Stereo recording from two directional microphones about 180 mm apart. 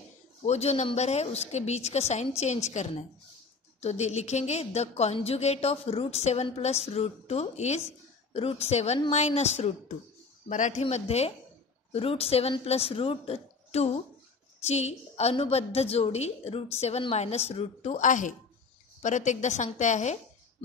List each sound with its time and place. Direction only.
0.5 s a woman's voice: 35° left (ahead or behind)